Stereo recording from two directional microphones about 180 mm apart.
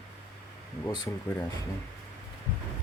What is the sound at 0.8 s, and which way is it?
Speech, 20° left (ahead or behind).